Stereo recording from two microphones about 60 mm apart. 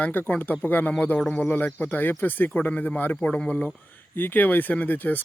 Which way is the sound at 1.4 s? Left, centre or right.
Left.